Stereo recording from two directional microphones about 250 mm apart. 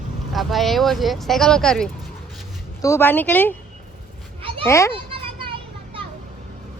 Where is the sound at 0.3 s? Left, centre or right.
Centre.